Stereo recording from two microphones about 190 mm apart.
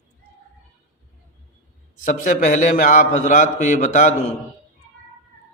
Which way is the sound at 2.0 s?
40° left (ahead or behind).